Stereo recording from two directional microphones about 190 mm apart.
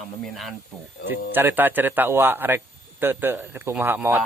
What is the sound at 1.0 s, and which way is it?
Speech, 10° right (ahead or behind).